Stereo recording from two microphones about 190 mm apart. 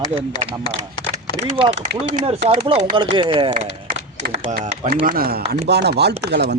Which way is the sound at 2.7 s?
40° right (ahead or behind).